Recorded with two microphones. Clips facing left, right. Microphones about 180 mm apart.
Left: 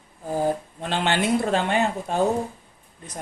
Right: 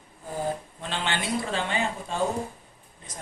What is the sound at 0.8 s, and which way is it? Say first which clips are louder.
Speech: left 7 dB; 60° left (ahead or behind).